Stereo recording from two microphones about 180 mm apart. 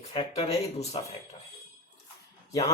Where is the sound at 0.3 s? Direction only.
35° left (ahead or behind).